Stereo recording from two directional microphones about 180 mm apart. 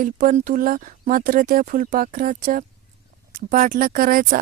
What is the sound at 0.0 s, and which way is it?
Speech, 45° right (ahead or behind).